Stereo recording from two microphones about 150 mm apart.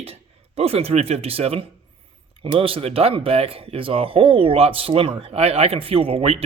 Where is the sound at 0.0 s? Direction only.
40° right (ahead or behind).